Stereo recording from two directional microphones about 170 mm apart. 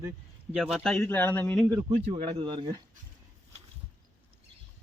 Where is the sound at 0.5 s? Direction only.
5° right (ahead or behind).